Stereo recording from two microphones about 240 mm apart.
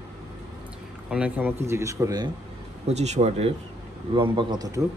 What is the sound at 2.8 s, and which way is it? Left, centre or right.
A man's voice, right.